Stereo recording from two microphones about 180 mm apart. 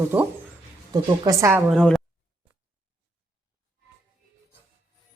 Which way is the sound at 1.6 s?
5° left (ahead or behind).